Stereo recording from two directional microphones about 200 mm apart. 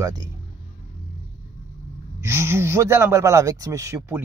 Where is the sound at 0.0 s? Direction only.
20° right (ahead or behind).